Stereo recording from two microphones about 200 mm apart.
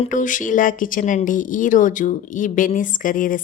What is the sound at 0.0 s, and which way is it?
A woman's voice, 40° left (ahead or behind).